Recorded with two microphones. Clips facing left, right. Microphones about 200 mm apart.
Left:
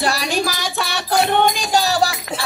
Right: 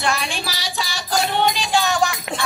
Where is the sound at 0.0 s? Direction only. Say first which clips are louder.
Left 4 dB; 35° left (ahead or behind).